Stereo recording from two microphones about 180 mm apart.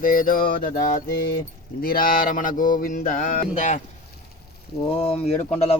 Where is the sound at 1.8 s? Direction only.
55° left (ahead or behind).